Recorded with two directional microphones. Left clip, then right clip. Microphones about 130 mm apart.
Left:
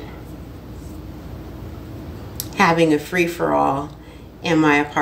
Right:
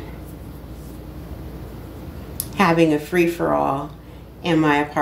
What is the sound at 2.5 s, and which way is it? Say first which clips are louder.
A woman's voice: left 1 dB; 25° left (ahead or behind).